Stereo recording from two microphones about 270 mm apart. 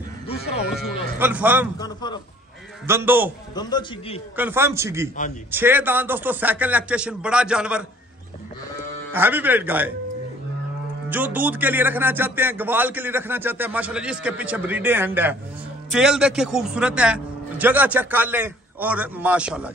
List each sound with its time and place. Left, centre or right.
0.3 s music: left
0.7 s speech: centre
1.8 s a sound: centre
2.9 s speech: centre
3.5 s a man's voice: centre
4.4 s speech: centre
9.1 s speech: centre
11.1 s a man's voice: centre